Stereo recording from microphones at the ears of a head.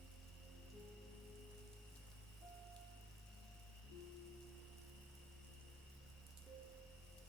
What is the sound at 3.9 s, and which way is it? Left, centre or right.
Music, left.